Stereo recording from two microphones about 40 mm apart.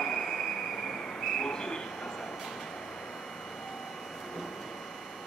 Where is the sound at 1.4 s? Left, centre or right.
Centre.